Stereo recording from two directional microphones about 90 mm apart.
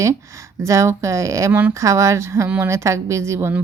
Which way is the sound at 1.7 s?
35° right (ahead or behind).